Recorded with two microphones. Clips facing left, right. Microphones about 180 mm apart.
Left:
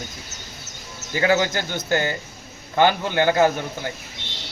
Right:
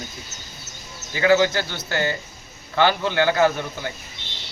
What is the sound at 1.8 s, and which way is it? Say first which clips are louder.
A man's voice: left 2 dB; 15° left (ahead or behind).